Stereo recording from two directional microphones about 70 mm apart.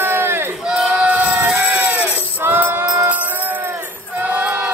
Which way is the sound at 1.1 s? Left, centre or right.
Right.